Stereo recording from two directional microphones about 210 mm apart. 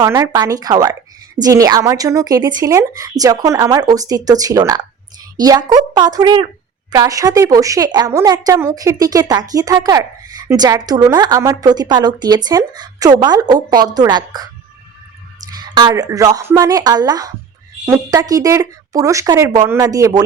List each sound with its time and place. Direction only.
0.0 s a woman's voice: 15° right (ahead or behind)
15.5 s a woman's voice: 20° right (ahead or behind)